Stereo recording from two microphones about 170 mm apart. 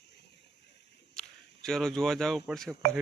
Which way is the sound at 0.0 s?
80° left.